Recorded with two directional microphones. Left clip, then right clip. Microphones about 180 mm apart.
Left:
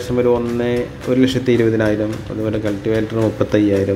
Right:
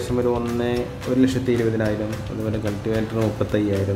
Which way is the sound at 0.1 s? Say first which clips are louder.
Left 7 dB; 10° left (ahead or behind).